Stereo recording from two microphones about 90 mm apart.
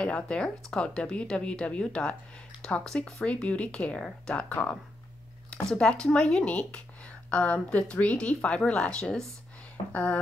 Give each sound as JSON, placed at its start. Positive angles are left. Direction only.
{"t": 0.0, "sound": "speech", "side_deg": 10}